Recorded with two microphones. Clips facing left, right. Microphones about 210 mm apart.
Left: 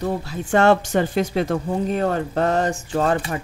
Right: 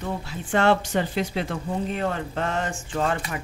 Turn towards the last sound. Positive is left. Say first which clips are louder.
# left 5 dB
turn(degrees=35)  # may be behind; listen again after turning